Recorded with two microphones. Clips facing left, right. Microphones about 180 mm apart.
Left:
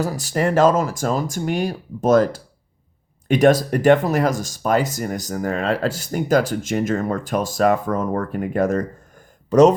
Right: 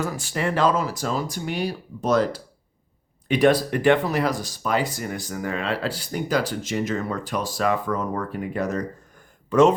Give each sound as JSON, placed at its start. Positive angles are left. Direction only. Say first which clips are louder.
{"t": 0.0, "sound": "speech", "louder": "left 5 dB", "side_deg": 40}